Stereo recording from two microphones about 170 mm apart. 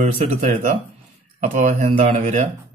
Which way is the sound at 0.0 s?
45° right (ahead or behind).